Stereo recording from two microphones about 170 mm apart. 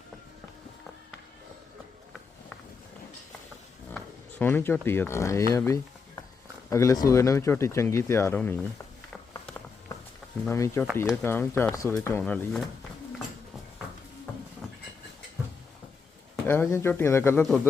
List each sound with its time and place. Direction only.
3.9 s speech: 10° left (ahead or behind)
5.5 s a sound: 20° left (ahead or behind)
6.7 s speech: 15° left (ahead or behind)
10.4 s speech: 15° left (ahead or behind)
16.5 s speech: 15° left (ahead or behind)